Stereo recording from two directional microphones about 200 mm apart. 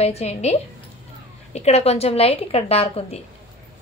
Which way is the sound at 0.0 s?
30° left (ahead or behind).